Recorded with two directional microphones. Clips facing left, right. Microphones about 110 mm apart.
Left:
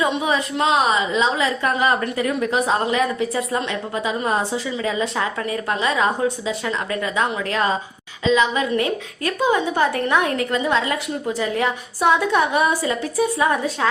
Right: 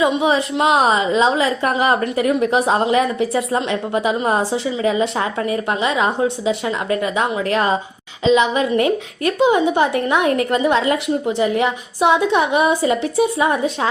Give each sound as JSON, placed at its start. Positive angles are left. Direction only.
{"t": 0.2, "sound": "a woman's voice", "side_deg": -30}
{"t": 10.2, "sound": "a woman's voice", "side_deg": -30}